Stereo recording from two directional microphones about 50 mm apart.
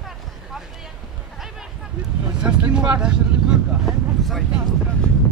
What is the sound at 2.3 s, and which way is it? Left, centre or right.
Vehicle, centre.